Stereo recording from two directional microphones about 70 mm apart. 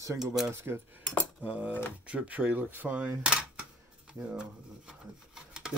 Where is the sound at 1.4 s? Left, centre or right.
Centre.